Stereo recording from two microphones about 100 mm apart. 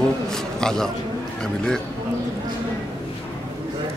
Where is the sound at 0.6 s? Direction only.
5° left (ahead or behind).